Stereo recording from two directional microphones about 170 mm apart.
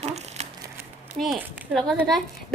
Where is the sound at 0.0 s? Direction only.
40° right (ahead or behind).